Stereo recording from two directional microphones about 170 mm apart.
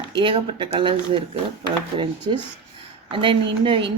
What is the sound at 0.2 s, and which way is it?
Speech, 30° right (ahead or behind).